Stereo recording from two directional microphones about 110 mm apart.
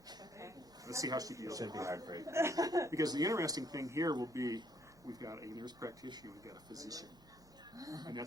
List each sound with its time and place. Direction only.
0.1 s a man's voice: 30° right (ahead or behind)